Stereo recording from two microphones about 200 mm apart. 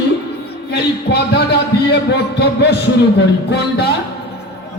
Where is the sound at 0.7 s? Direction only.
55° left (ahead or behind).